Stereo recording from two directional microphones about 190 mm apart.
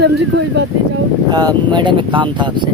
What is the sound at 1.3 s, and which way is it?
Speech, 20° right (ahead or behind).